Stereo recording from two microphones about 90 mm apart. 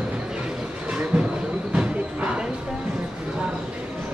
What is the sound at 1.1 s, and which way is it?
Train, 5° right (ahead or behind).